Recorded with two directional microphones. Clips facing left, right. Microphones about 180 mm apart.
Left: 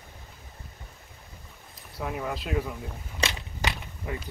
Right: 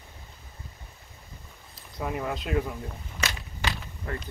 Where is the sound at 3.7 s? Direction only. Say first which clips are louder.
Even; 10° left (ahead or behind).